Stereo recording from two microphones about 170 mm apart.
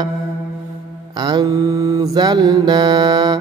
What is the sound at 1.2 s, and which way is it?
Mantra, 20° right (ahead or behind).